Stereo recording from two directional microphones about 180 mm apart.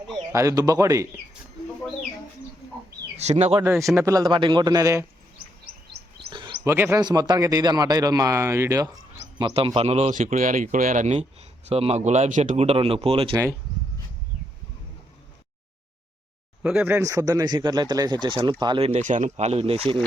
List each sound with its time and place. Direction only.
0.3 s speech: 20° right (ahead or behind)
3.2 s a man's voice: 40° right (ahead or behind)
3.8 s speech: 15° right (ahead or behind)
6.7 s a man's voice: 15° right (ahead or behind)
9.4 s a man's voice: 30° right (ahead or behind)
13.3 s a man's voice: 15° right (ahead or behind)
16.6 s a man's voice: 10° right (ahead or behind); by 19.8 s 35° right (ahead or behind)